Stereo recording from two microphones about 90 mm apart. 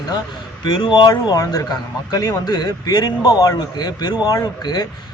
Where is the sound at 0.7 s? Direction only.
65° left (ahead or behind).